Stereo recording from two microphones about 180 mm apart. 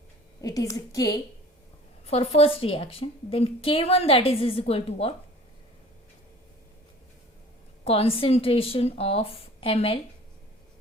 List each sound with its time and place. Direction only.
0.4 s a woman's voice: 20° left (ahead or behind)
2.0 s a woman's voice: 35° left (ahead or behind)
7.9 s a woman's voice: 30° left (ahead or behind)